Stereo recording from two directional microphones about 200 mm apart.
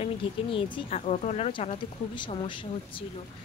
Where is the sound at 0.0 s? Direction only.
25° left (ahead or behind).